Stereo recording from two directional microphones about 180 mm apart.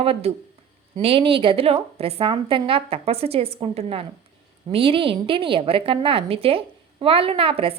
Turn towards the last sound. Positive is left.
turn(degrees=-30)  # may be behind; listen again after turning